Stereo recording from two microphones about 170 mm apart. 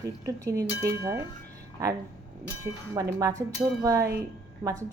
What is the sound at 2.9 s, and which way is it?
A woman's voice, 20° right (ahead or behind).